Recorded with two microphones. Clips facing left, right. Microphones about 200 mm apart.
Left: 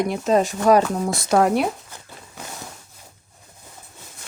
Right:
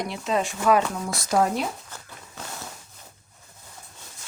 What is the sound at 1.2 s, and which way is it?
Speech, 65° left (ahead or behind).